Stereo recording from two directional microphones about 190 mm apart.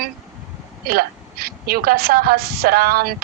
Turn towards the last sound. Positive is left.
turn(degrees=-50)  # may be behind; listen again after turning